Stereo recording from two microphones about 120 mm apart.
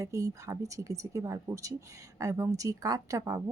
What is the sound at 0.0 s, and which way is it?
A woman's voice, 25° right (ahead or behind).